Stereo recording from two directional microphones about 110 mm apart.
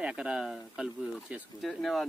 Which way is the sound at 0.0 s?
10° right (ahead or behind).